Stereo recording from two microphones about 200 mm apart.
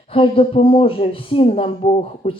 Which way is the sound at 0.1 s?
25° left (ahead or behind).